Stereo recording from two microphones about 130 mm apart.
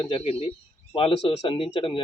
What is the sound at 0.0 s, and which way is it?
Speech, 40° left (ahead or behind).